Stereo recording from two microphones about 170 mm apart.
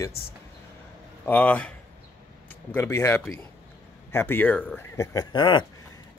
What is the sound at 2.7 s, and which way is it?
Speech, 15° left (ahead or behind).